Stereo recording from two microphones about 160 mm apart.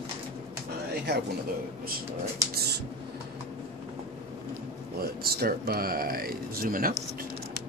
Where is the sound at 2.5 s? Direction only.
90° right.